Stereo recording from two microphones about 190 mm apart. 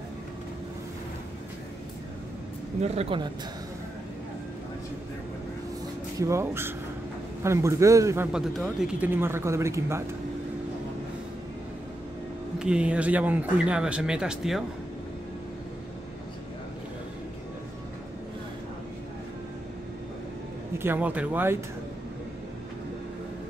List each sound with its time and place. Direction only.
2.8 s speech: 30° right (ahead or behind)
6.1 s speech: 15° right (ahead or behind)
8.3 s speech: centre (ahead or behind)
12.5 s speech: 5° right (ahead or behind)
20.7 s speech: 10° right (ahead or behind)